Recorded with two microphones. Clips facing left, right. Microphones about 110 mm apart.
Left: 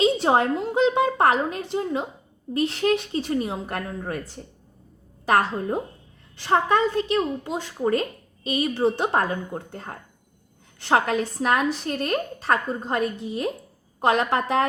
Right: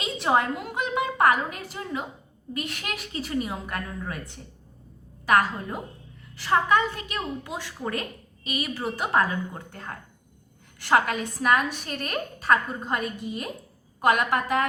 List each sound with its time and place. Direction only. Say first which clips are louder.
0.0 s a woman's voice: left 5 dB; 30° left (ahead or behind)
3.8 s a woman's voice: left 4 dB; 50° left (ahead or behind)
5.2 s a woman's voice: left 1 dB; 30° left (ahead or behind)